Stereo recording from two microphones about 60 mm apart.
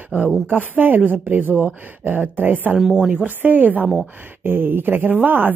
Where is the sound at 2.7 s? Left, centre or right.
Centre.